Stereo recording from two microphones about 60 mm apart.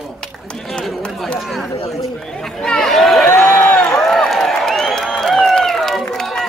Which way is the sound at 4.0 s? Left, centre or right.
Centre.